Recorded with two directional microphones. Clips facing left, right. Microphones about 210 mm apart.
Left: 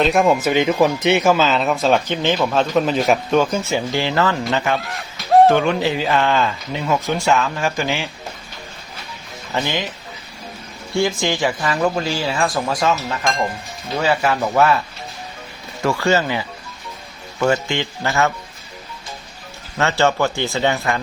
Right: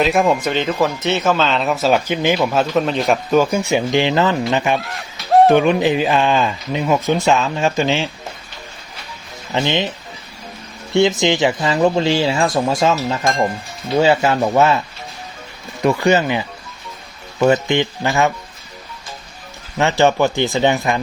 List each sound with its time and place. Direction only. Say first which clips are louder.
0.0 s speech: even; centre (ahead or behind)
3.4 s speech: right 3 dB; 15° right (ahead or behind)
4.8 s a sound: even; centre (ahead or behind)
5.5 s speech: right 3 dB; 15° right (ahead or behind)
9.5 s speech: right 4 dB; 20° right (ahead or behind)
10.9 s speech: right 5 dB; 20° right (ahead or behind)
15.8 s speech: right 3 dB; 20° right (ahead or behind)
19.8 s speech: right 3 dB; 15° right (ahead or behind)